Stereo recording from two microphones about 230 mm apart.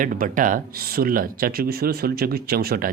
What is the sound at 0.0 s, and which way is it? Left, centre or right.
Speech, right.